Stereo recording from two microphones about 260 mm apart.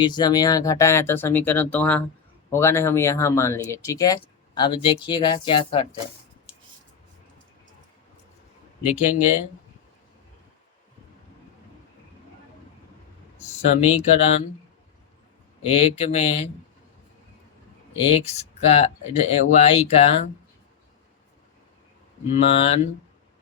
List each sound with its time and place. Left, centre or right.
0.0 s speech: centre
8.9 s speech: left
13.7 s speech: left
15.6 s speech: left
18.1 s speech: left
22.3 s speech: left